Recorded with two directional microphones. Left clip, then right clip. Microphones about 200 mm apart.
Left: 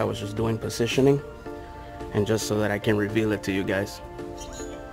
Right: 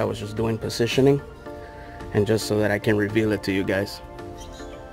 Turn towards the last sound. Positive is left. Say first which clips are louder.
# right 2 dB
turn(degrees=-10)  # may be behind; listen again after turning